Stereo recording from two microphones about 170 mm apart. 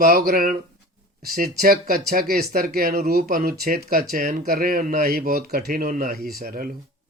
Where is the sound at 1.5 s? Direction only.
60° right (ahead or behind).